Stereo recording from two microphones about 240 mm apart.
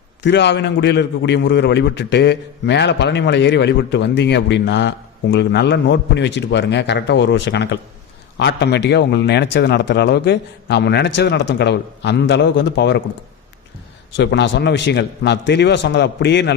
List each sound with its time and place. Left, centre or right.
0.2 s a man's voice: left
14.2 s a man's voice: left